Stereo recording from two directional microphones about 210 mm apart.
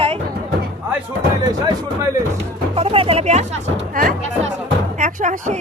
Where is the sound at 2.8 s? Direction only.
25° right (ahead or behind).